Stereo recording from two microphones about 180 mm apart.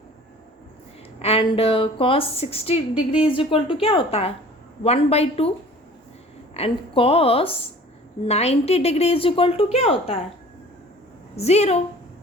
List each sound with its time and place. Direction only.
1.2 s a woman's voice: 30° left (ahead or behind)
6.5 s a woman's voice: 30° left (ahead or behind)
11.3 s a woman's voice: 35° left (ahead or behind)